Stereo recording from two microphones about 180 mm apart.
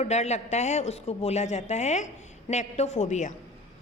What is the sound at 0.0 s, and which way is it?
Speech, 40° left (ahead or behind).